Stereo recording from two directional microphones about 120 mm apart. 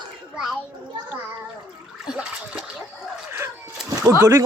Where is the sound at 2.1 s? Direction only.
10° right (ahead or behind).